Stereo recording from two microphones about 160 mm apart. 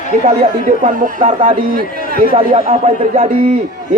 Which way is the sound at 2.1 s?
65° right (ahead or behind).